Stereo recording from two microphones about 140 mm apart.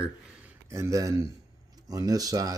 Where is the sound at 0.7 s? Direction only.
20° right (ahead or behind).